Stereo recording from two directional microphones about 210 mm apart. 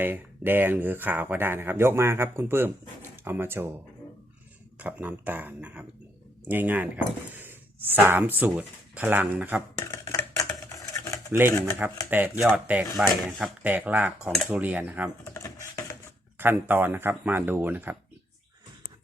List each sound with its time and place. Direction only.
0.0 s speech: 10° right (ahead or behind)
4.8 s speech: 5° right (ahead or behind)
9.7 s a sound: 15° left (ahead or behind)
11.3 s speech: 10° right (ahead or behind)
15.2 s typing: 15° left (ahead or behind)
16.4 s speech: 10° right (ahead or behind)